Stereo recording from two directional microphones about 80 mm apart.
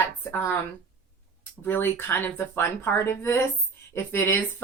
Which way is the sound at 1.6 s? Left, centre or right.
Left.